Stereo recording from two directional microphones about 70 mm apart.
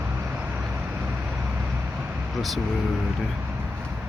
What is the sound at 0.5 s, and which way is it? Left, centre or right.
Vehicle, right.